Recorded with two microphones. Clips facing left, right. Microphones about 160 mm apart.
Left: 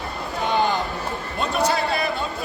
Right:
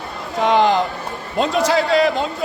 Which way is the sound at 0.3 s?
90° right.